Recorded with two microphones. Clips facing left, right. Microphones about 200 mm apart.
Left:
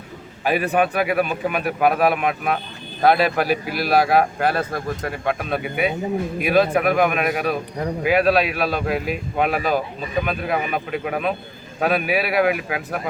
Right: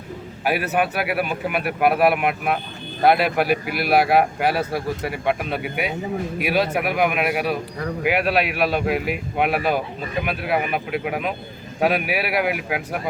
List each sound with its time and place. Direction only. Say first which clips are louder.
0.4 s speech: left 2 dB; 5° right (ahead or behind)
3.4 s a man's voice: even; 60° right (ahead or behind)
3.9 s speech: even; 10° right (ahead or behind)